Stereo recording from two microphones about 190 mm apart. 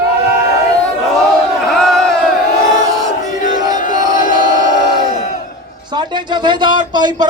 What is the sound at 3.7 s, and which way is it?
Battle cry, 45° left (ahead or behind).